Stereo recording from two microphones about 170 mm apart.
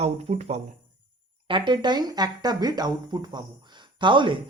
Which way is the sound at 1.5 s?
25° right (ahead or behind).